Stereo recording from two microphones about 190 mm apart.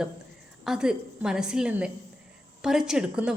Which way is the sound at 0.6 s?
5° right (ahead or behind).